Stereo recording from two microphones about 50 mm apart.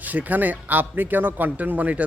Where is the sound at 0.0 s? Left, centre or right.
Right.